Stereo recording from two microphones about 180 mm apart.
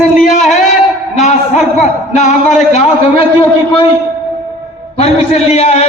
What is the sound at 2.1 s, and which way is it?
Speech, 40° left (ahead or behind).